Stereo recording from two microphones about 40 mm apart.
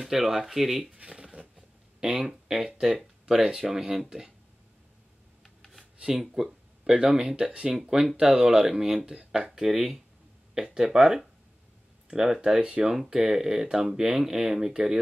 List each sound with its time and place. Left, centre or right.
0.0 s speech: centre
1.0 s a sound: centre
2.0 s speech: centre
5.4 s rub: centre
5.9 s speech: centre
8.2 s speech: right
8.5 s speech: centre
9.6 s speech: centre
12.8 s speech: centre